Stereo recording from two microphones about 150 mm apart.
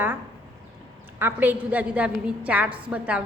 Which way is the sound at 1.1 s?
15° right (ahead or behind).